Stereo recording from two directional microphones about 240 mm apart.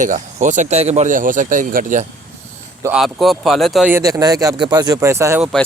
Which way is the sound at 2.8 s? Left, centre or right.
Centre.